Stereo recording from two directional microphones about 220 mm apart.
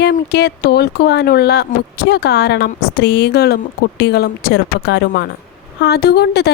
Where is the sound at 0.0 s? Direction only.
45° left (ahead or behind).